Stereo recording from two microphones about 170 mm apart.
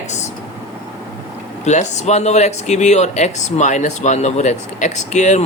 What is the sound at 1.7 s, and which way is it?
Speech, 45° left (ahead or behind).